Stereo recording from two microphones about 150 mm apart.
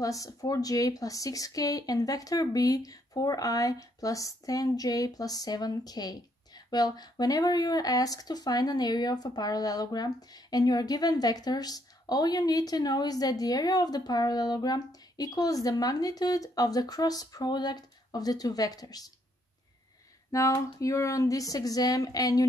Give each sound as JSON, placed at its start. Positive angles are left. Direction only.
{"t": 0.0, "sound": "speech", "side_deg": 25}
{"t": 20.2, "sound": "speech", "side_deg": 20}